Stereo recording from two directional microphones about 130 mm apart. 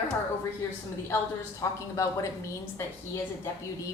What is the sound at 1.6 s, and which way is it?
A woman's voice, 20° left (ahead or behind).